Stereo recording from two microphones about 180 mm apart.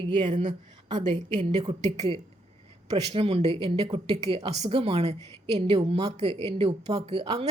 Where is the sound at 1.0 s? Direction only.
40° right (ahead or behind).